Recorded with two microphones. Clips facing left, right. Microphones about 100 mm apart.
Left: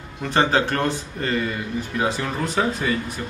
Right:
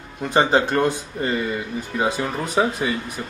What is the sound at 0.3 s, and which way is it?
Speech, 15° right (ahead or behind).